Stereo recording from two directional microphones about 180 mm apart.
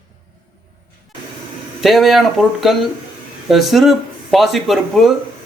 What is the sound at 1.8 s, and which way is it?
A man's voice, centre (ahead or behind).